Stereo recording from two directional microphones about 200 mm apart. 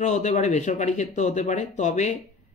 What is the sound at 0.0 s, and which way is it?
Speech, 35° left (ahead or behind).